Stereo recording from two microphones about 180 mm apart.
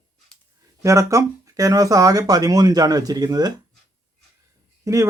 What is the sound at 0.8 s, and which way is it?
Speech, 15° right (ahead or behind).